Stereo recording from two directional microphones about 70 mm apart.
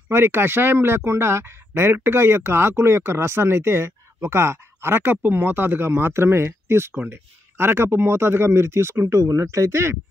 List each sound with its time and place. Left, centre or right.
0.1 s speech: right